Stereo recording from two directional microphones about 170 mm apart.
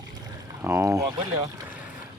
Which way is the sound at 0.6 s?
15° right (ahead or behind).